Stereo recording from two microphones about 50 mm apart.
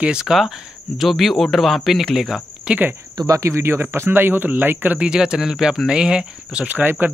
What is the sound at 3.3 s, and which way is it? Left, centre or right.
Speech, right.